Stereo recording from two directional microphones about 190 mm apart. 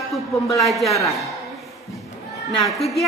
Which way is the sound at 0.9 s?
15° left (ahead or behind).